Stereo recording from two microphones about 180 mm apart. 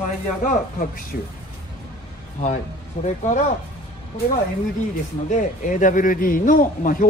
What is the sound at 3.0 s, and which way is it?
Speech, 40° left (ahead or behind).